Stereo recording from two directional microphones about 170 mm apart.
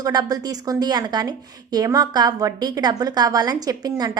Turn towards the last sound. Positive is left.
turn(degrees=-25)  # may be behind; listen again after turning